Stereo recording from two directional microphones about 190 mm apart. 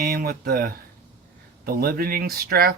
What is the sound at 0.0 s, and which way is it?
Speech, 55° right (ahead or behind).